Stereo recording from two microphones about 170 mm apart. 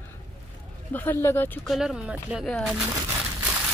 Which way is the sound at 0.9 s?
10° left (ahead or behind).